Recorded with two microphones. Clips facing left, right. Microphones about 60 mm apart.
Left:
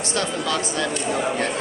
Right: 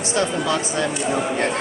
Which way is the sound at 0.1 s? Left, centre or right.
Right.